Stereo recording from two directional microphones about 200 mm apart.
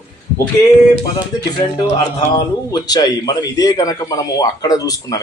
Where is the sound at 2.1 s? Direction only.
20° left (ahead or behind).